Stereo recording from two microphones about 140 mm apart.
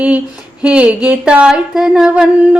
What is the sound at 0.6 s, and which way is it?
Speech, 10° right (ahead or behind).